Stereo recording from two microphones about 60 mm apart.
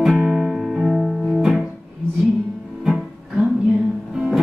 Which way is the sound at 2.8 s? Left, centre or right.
Centre.